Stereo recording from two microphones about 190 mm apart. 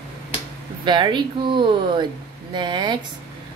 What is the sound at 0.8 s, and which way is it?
A woman's voice, 25° right (ahead or behind).